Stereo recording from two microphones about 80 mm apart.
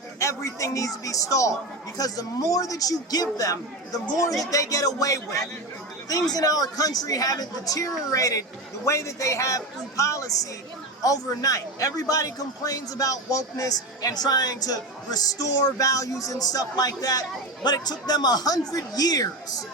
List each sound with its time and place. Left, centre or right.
0.2 s a man's voice: left
6.3 s a man's voice: left